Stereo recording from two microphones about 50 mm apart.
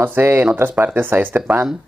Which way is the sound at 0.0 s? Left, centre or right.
Right.